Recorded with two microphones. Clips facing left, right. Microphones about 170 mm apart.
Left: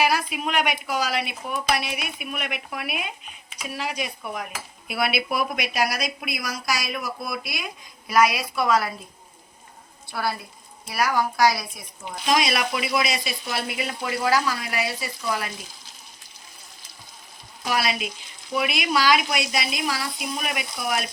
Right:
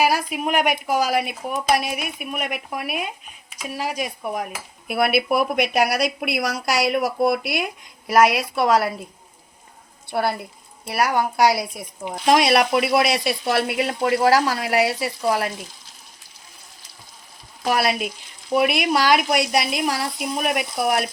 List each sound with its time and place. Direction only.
0.0 s speech: 45° right (ahead or behind)
4.9 s speech: 55° right (ahead or behind); by 8.9 s 70° right (ahead or behind)
10.1 s speech: 60° right (ahead or behind)
17.6 s speech: 60° right (ahead or behind)